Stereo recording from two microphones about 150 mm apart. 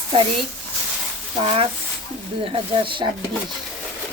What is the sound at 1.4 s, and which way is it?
Speech, 40° right (ahead or behind).